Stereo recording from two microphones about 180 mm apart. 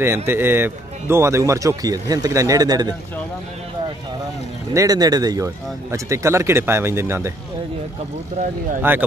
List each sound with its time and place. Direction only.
0.3 s speech: 10° right (ahead or behind)
4.7 s speech: 20° right (ahead or behind)
8.9 s speech: 10° right (ahead or behind)